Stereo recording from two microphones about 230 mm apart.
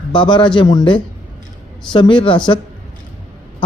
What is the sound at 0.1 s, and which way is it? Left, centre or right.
A man's voice, centre.